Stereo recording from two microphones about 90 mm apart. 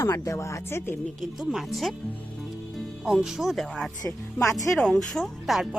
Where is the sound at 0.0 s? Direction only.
30° left (ahead or behind).